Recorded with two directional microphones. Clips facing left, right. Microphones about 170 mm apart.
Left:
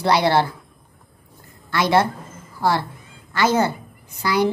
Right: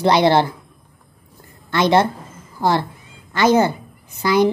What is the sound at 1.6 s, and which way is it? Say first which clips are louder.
Speech: right 3 dB; 20° right (ahead or behind).